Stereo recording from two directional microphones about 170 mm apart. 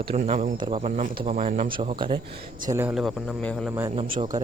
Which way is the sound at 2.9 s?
Centre (ahead or behind).